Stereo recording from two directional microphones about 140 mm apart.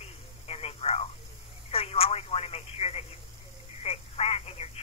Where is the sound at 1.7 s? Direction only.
45° left (ahead or behind).